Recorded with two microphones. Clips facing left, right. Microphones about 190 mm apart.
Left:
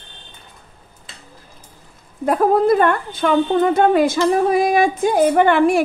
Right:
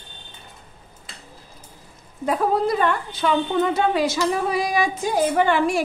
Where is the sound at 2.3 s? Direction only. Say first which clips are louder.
Left 6 dB; 50° left (ahead or behind).